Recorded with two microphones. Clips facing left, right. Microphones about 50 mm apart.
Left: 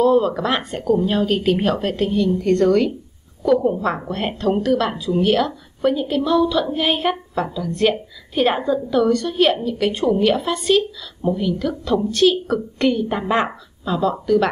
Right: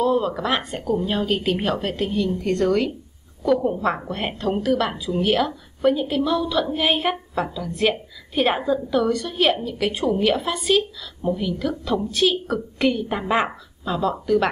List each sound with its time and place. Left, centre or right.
0.0 s a woman's voice: centre